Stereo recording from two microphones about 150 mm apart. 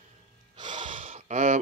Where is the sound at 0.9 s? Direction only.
55° right (ahead or behind).